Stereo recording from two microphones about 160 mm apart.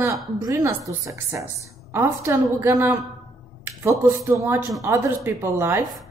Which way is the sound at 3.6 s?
15° right (ahead or behind).